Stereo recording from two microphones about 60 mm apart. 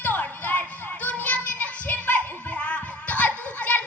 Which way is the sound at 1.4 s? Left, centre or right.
Left.